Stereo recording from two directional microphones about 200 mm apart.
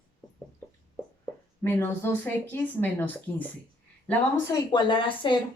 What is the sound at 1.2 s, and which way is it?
Speech, 10° left (ahead or behind).